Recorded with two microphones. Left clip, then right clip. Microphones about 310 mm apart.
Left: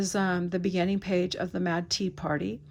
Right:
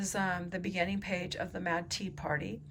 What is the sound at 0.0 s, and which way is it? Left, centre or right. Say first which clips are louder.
A woman's voice: left 5 dB; centre.